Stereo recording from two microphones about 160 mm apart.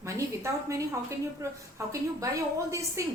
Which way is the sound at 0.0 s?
20° right (ahead or behind).